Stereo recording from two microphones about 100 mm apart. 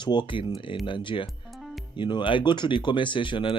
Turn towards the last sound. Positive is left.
turn(degrees=55)  # may be behind; listen again after turning